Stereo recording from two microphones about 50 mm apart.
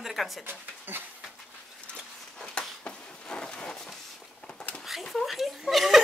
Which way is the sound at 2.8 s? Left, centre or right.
Centre.